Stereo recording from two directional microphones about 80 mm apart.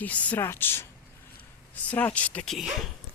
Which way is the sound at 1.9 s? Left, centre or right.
Centre.